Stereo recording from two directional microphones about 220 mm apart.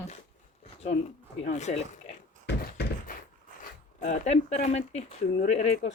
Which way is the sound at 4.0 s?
30° left (ahead or behind).